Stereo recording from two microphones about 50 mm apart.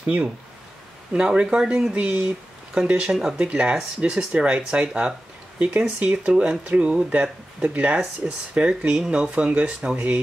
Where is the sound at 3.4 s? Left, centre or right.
Right.